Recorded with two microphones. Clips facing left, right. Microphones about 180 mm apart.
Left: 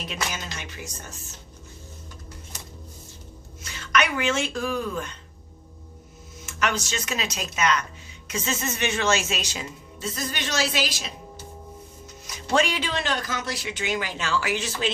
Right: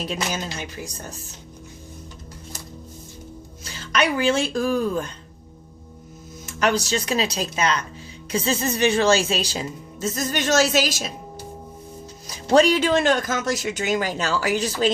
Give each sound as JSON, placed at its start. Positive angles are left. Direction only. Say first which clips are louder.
{"t": 0.0, "sound": "speech", "louder": "right 5 dB", "side_deg": -35}
{"t": 3.6, "sound": "speech", "louder": "right 2 dB", "side_deg": -30}
{"t": 6.4, "sound": "speech", "louder": "right 5 dB", "side_deg": -35}
{"t": 12.5, "sound": "speech", "louder": "right 8 dB", "side_deg": -40}